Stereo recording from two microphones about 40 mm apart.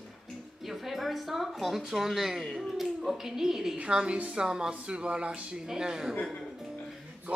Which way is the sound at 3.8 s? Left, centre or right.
Right.